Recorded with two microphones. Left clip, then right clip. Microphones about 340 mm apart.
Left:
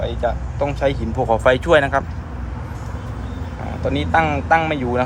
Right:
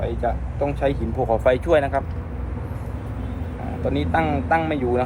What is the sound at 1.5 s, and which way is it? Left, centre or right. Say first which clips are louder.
Speech: left 4 dB; left.